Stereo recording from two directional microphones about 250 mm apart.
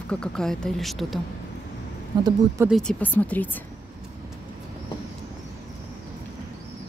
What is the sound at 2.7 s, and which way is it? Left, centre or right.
Speech, centre.